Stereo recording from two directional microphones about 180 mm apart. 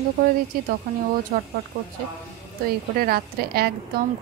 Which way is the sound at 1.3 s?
45° right (ahead or behind).